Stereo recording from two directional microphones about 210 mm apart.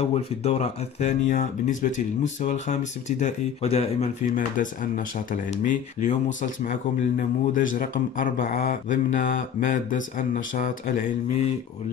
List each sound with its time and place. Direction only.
0.0 s speech: 30° left (ahead or behind)